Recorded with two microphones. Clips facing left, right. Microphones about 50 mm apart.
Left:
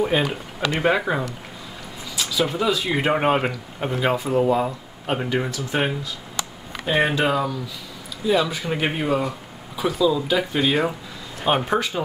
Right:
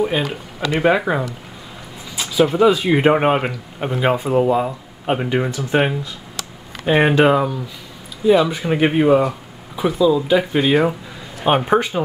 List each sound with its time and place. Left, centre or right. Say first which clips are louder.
0.0 s speech: right 1 dB; centre
2.1 s speech: right 7 dB; right; by 3.9 s centre
3.9 s speech: right 4 dB; centre
4.5 s speech: right 3 dB; centre
5.0 s speech: right 4 dB; centre